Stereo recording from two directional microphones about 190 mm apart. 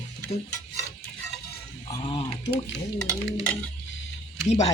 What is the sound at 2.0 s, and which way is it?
Speech, 25° left (ahead or behind).